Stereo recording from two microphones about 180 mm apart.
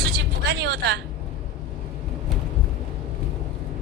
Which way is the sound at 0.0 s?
70° right (ahead or behind).